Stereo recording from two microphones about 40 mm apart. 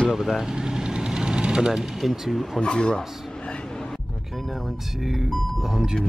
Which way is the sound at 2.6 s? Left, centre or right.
Left.